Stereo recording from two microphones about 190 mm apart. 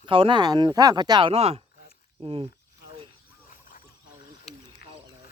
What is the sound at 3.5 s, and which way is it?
Wild animals, 45° left (ahead or behind).